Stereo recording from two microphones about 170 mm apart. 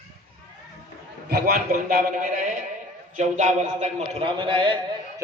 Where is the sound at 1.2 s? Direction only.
65° right (ahead or behind); by 4.7 s 30° right (ahead or behind).